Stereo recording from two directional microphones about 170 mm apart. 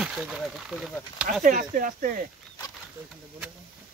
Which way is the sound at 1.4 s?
50° right (ahead or behind).